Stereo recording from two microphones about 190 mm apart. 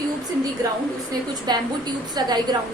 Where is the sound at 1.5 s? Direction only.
20° right (ahead or behind).